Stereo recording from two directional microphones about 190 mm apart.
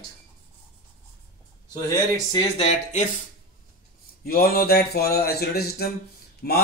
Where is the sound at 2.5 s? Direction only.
35° left (ahead or behind).